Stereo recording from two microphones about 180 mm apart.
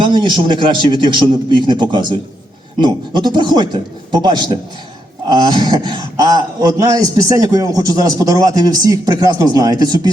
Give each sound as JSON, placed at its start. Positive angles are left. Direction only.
{"t": 0.0, "sound": "speech", "side_deg": -25}